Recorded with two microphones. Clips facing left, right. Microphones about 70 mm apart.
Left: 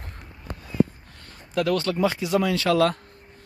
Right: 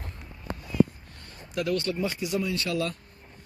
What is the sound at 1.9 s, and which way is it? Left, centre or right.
Speech, left.